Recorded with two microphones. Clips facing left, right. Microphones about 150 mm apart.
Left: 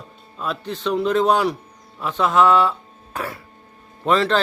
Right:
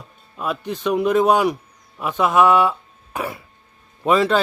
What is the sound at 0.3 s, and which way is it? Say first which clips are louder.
A man's voice: right 2 dB; 10° right (ahead or behind).